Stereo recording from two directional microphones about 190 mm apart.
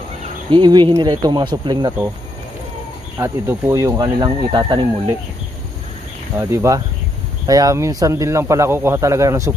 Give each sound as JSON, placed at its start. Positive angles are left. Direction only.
{"t": 0.5, "sound": "speech", "side_deg": -25}
{"t": 3.2, "sound": "speech", "side_deg": -15}
{"t": 6.3, "sound": "speech", "side_deg": -15}